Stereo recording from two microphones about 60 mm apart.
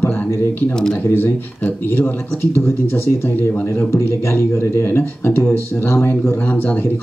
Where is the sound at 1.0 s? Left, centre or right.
Left.